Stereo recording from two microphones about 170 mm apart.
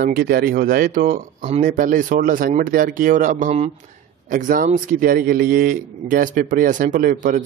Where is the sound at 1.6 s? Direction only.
55° right (ahead or behind).